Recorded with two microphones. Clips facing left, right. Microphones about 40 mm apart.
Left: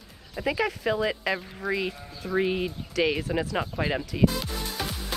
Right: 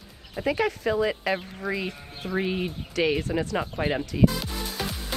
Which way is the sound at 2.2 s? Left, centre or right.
Right.